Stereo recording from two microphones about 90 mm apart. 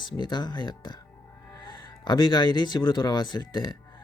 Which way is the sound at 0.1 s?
55° left (ahead or behind).